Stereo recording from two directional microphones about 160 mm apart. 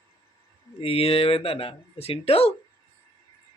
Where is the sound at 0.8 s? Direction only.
35° left (ahead or behind).